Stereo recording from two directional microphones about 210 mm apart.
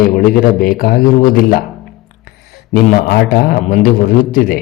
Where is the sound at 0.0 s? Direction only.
45° left (ahead or behind).